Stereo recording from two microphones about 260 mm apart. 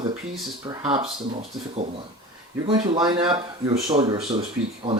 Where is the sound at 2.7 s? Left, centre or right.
Centre.